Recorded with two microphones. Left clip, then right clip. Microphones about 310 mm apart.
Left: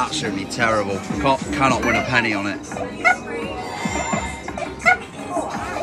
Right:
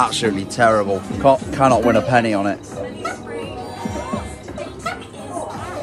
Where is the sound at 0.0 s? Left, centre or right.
Centre.